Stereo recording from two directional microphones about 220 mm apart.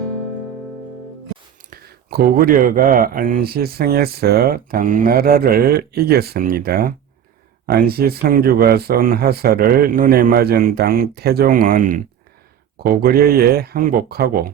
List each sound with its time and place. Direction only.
1.7 s speech: 45° right (ahead or behind)